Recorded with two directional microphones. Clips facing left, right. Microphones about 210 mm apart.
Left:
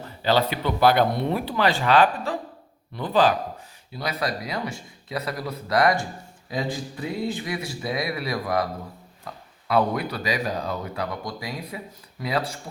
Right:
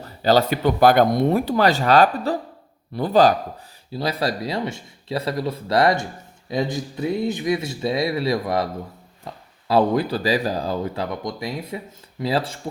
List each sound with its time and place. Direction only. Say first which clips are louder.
0.0 s speech: right 4 dB; 40° right (ahead or behind)
3.9 s speech: right 4 dB; 30° right (ahead or behind)